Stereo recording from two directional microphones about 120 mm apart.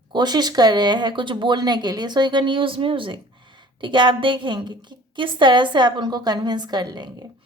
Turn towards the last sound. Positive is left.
turn(degrees=-35)  # may be behind; listen again after turning